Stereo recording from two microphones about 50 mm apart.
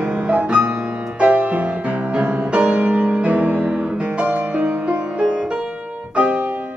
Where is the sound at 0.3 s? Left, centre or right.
Right.